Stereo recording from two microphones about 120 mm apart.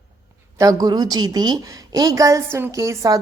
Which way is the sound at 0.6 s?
30° right (ahead or behind).